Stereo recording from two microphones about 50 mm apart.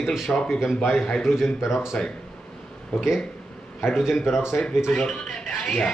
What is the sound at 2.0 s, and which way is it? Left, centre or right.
Speech, centre.